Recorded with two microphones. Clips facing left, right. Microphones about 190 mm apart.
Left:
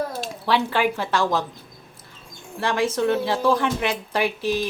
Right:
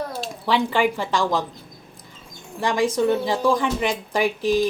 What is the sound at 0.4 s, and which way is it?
A woman's voice, 15° right (ahead or behind).